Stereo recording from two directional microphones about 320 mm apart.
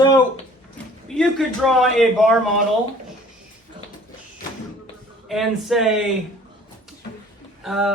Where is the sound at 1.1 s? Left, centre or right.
Centre.